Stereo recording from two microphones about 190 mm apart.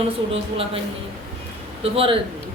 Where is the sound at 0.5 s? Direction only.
30° right (ahead or behind).